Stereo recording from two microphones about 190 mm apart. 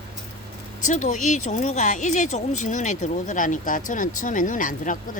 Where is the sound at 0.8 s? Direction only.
40° left (ahead or behind).